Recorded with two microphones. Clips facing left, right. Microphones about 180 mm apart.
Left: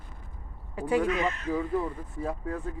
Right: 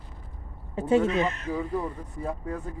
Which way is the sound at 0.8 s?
25° right (ahead or behind).